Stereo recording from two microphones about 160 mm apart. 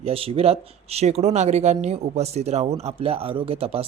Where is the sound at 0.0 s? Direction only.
35° right (ahead or behind).